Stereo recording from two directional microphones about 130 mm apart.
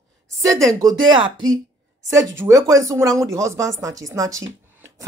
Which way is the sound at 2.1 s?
25° right (ahead or behind).